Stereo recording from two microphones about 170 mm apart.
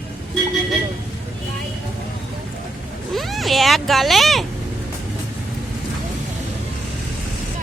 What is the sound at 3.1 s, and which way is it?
Speech, centre (ahead or behind).